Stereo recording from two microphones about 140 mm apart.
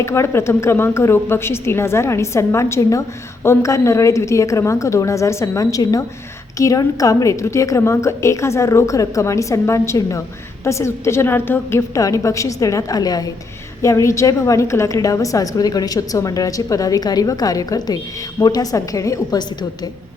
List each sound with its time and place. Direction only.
0.0 s a woman's voice: 20° left (ahead or behind)